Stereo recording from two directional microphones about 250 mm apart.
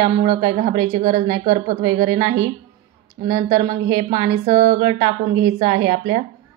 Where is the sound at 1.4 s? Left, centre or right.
Right.